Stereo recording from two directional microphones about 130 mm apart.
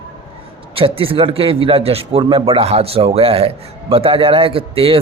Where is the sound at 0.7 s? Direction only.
45° right (ahead or behind).